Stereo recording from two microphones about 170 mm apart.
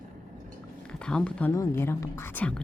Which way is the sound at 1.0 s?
5° left (ahead or behind).